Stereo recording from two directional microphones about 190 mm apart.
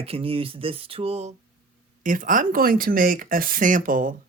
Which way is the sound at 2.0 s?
45° right (ahead or behind).